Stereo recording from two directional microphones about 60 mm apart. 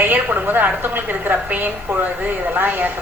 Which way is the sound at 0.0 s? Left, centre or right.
Right.